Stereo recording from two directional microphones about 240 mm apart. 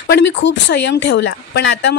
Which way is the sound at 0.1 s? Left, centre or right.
Left.